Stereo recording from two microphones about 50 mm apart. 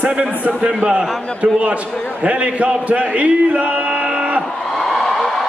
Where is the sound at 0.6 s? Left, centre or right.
Right.